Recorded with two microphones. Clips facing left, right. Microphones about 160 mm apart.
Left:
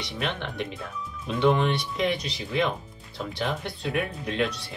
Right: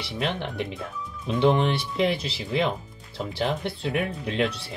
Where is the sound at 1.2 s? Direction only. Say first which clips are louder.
Right 1 dB; 25° right (ahead or behind).